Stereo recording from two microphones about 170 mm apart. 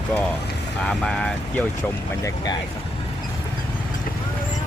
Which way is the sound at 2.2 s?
25° left (ahead or behind).